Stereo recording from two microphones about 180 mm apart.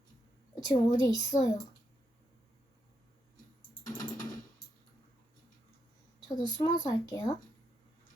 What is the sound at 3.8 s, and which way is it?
Typing, 20° left (ahead or behind).